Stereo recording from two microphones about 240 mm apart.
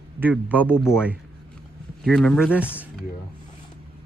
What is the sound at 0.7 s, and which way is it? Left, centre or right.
Speech, centre.